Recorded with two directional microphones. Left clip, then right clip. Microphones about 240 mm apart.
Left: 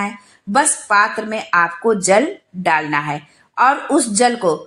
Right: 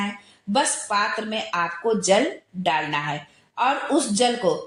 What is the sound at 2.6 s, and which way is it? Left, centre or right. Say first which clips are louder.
Speech: left 6 dB; left.